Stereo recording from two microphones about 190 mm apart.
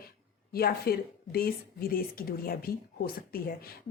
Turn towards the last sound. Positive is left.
turn(degrees=50)  # may be behind; listen again after turning